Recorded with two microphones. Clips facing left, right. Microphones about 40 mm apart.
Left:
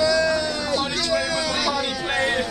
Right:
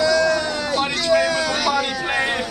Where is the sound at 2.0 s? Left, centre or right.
Centre.